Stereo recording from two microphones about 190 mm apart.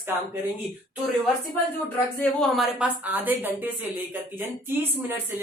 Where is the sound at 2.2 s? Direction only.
5° left (ahead or behind).